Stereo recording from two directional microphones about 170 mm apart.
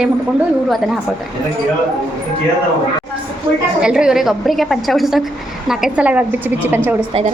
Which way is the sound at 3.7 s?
5° right (ahead or behind).